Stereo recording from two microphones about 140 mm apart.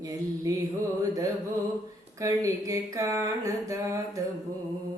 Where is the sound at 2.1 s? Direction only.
25° right (ahead or behind).